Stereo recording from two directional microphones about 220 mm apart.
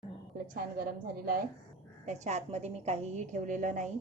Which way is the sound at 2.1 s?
30° right (ahead or behind).